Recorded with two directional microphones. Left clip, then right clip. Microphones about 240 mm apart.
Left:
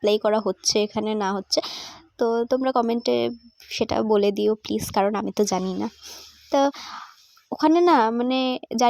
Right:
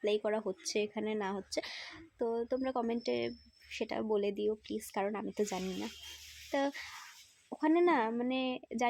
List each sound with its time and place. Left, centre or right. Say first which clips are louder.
0.0 s speech: left 13 dB; left